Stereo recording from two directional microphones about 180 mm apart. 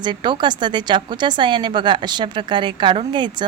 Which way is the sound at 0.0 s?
25° right (ahead or behind).